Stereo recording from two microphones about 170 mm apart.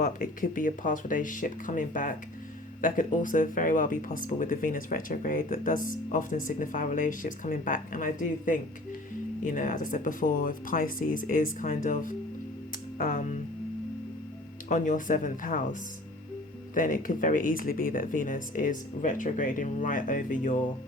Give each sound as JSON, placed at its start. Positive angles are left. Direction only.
{"t": 0.0, "sound": "speech", "side_deg": 55}
{"t": 14.7, "sound": "speech", "side_deg": 50}
{"t": 16.7, "sound": "speech", "side_deg": 50}